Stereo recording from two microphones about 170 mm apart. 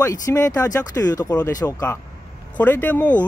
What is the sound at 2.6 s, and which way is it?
Speech, 10° left (ahead or behind).